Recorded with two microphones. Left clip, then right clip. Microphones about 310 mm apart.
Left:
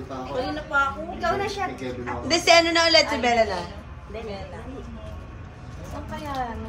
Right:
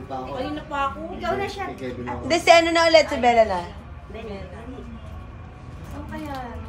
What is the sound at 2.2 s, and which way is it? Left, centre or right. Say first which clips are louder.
A woman's voice: right 2 dB; right.